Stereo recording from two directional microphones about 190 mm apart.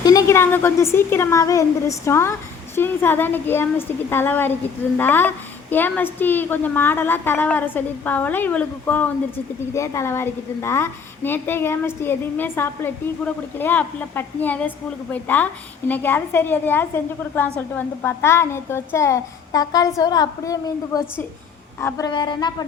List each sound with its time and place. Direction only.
0.0 s a woman's voice: 20° left (ahead or behind)